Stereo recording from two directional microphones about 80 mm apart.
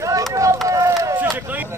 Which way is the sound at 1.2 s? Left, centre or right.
Right.